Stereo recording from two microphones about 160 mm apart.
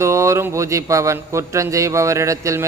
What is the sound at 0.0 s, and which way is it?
A man's voice, 20° right (ahead or behind).